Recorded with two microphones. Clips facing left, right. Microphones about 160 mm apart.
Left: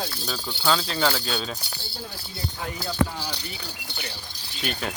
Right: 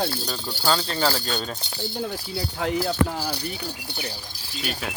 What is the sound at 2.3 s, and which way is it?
Speech, 85° right.